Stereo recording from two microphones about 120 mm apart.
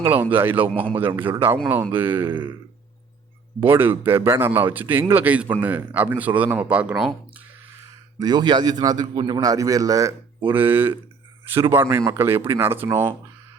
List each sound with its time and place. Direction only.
0.0 s speech: 15° right (ahead or behind)
3.6 s speech: 15° right (ahead or behind)
8.2 s a man's voice: 35° right (ahead or behind)
10.4 s speech: 15° right (ahead or behind)